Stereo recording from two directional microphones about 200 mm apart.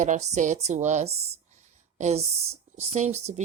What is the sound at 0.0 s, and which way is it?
Speech, 40° right (ahead or behind).